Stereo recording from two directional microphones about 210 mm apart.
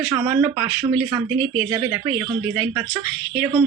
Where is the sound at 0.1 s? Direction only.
15° right (ahead or behind).